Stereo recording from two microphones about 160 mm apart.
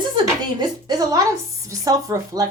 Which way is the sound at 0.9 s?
25° right (ahead or behind).